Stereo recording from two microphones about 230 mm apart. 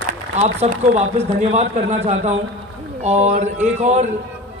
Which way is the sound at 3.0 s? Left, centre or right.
Right.